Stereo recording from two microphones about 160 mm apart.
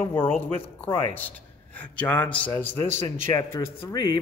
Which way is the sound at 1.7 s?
10° left (ahead or behind).